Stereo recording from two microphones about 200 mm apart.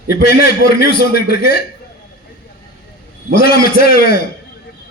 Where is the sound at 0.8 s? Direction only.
50° left (ahead or behind).